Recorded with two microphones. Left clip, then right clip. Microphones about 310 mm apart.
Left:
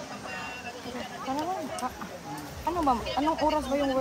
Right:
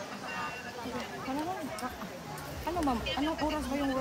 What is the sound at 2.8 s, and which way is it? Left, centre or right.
Speech, left.